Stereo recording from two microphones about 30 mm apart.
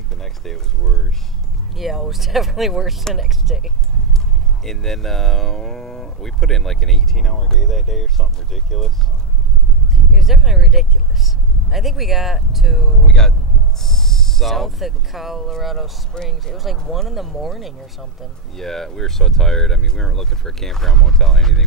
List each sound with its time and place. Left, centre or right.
0.2 s a sound: centre
1.8 s speech: centre
4.6 s speech: centre
10.1 s speech: centre
13.7 s owl: centre
14.4 s speech: centre
16.1 s speech: left
16.7 s speech: centre
18.6 s speech: centre